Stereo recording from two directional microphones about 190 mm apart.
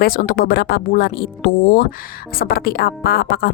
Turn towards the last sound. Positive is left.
turn(degrees=55)  # may be behind; listen again after turning